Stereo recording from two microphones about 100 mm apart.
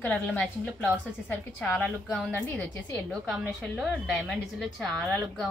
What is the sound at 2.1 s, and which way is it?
Speech, 10° left (ahead or behind).